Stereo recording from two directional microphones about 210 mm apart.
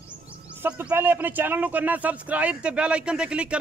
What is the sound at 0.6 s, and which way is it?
Speech, 10° right (ahead or behind).